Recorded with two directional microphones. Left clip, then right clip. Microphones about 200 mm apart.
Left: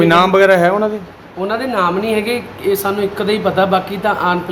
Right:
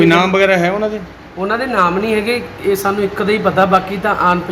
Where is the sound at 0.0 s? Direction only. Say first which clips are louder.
Left 1 dB; 15° left (ahead or behind).